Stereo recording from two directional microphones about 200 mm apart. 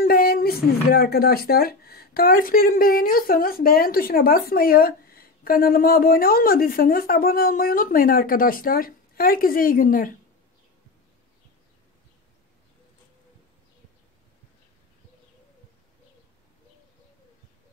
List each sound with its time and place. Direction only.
0.0 s speech: 45° left (ahead or behind)